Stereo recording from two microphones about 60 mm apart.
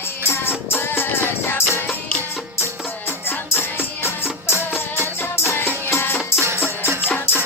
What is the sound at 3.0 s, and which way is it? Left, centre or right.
Music, left.